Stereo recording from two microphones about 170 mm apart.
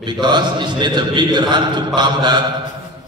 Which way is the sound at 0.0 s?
25° right (ahead or behind).